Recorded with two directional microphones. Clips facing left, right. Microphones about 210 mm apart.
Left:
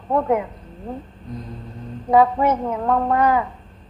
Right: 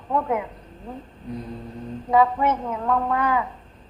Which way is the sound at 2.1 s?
40° left (ahead or behind).